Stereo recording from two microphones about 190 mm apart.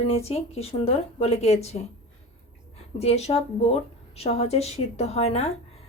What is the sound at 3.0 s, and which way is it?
A woman's voice, 35° left (ahead or behind).